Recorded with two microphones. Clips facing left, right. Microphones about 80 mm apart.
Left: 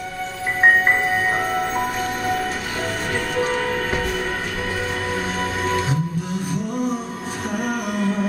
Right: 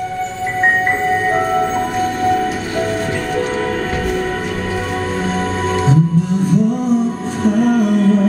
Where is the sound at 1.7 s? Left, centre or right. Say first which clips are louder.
Right 6 dB; centre.